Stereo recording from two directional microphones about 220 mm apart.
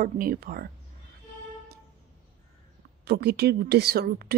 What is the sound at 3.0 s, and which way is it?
A woman's voice, 50° right (ahead or behind).